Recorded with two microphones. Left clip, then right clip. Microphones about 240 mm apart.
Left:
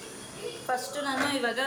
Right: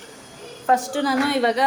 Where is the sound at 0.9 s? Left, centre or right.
Right.